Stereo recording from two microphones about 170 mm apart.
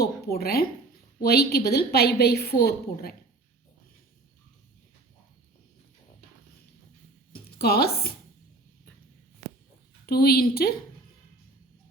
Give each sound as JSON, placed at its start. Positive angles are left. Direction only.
{"t": 0.0, "sound": "a woman's voice", "side_deg": 65}
{"t": 7.3, "sound": "speech", "side_deg": 65}
{"t": 10.1, "sound": "a woman's voice", "side_deg": 65}